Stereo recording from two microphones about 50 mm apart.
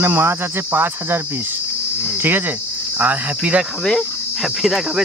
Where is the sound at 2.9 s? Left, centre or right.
Right.